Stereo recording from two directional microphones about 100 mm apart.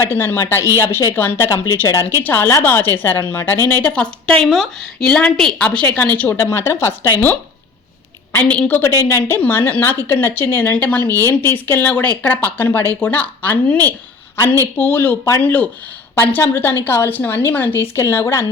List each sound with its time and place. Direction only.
0.0 s a woman's voice: 25° left (ahead or behind)
6.3 s a woman's voice: 25° left (ahead or behind)
8.3 s a woman's voice: 15° left (ahead or behind)